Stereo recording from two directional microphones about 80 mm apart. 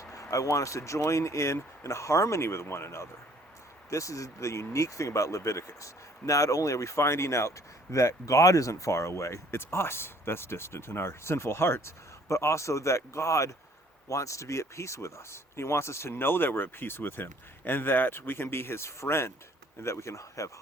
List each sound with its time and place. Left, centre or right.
0.0 s speech: left